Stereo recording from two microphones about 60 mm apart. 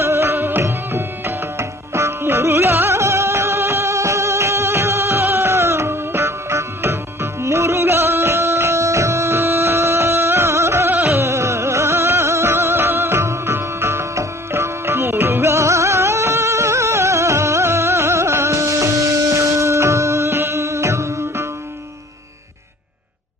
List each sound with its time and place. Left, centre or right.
0.0 s music: right
3.0 s music: right